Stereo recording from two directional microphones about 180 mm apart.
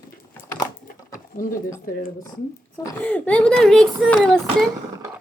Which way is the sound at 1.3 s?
50° left (ahead or behind).